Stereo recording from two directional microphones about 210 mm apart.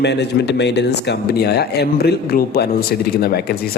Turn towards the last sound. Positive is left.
turn(degrees=50)  # may be behind; listen again after turning